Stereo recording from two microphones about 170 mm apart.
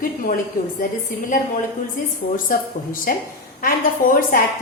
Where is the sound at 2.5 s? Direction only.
55° left (ahead or behind).